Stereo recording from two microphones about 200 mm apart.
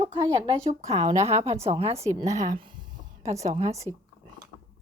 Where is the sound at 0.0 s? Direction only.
20° right (ahead or behind).